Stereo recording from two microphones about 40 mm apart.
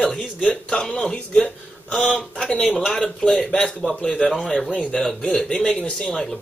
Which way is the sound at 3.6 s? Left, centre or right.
Centre.